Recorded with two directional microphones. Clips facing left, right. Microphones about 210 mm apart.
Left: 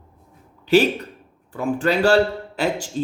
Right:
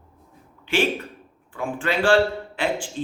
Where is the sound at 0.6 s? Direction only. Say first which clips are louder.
Left 7 dB; 40° left (ahead or behind).